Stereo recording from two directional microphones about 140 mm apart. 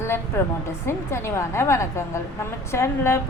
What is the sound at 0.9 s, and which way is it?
A woman's voice, 20° left (ahead or behind).